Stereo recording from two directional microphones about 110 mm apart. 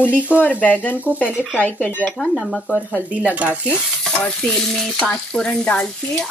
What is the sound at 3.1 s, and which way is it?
Speech, 10° right (ahead or behind).